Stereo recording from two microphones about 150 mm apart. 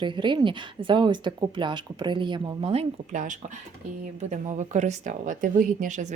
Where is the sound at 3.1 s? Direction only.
55° right (ahead or behind).